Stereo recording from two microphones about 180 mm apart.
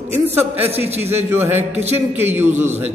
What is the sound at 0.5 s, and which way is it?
Speech, 35° right (ahead or behind).